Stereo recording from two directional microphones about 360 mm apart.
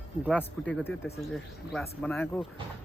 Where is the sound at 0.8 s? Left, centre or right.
Centre.